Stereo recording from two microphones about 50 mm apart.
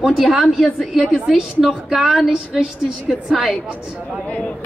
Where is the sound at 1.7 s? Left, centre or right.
Centre.